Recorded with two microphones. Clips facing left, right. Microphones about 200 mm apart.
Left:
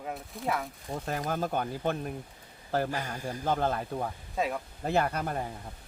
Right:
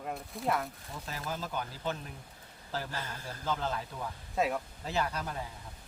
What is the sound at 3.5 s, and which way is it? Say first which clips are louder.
Speech: left 5 dB; 55° left (ahead or behind).